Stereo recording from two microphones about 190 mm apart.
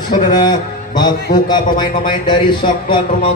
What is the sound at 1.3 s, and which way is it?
A man's voice, 20° left (ahead or behind).